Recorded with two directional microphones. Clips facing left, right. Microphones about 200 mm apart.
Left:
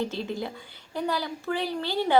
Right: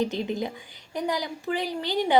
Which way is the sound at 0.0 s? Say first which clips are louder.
Right 3 dB; 15° right (ahead or behind).